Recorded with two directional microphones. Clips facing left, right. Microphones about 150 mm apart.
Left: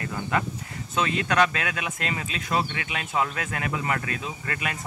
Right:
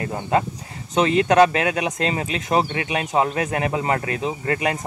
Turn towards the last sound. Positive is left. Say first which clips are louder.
# right 9 dB
turn(degrees=-25)  # may be behind; listen again after turning